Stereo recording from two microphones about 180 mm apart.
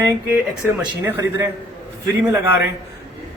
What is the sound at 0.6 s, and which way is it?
Speech, 10° right (ahead or behind).